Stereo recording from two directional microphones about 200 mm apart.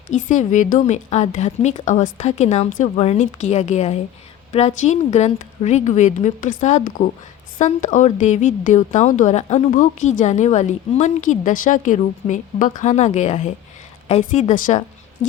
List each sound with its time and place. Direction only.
0.1 s a woman's voice: 40° left (ahead or behind)